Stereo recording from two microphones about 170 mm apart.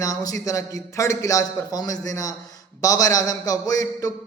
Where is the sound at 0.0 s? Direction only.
20° left (ahead or behind).